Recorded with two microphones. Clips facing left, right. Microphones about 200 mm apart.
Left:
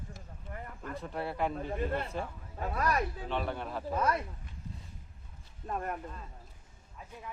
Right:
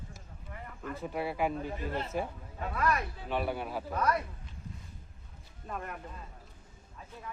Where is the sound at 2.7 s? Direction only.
40° left (ahead or behind).